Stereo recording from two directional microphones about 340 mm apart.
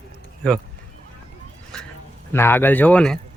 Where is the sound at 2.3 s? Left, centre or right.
Centre.